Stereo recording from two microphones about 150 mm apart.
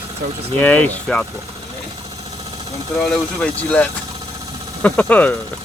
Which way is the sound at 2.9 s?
5° left (ahead or behind).